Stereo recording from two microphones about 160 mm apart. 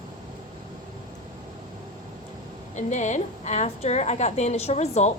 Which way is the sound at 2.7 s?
50° left (ahead or behind).